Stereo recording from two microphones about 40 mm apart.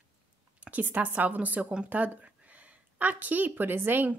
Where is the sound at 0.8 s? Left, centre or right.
Right.